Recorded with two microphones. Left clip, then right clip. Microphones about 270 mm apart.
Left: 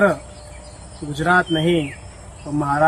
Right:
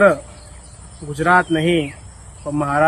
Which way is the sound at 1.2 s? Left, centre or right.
Centre.